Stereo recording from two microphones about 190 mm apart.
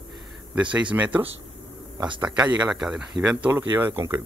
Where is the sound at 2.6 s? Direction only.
5° right (ahead or behind).